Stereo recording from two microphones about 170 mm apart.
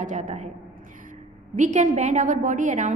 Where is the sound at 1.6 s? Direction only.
45° right (ahead or behind).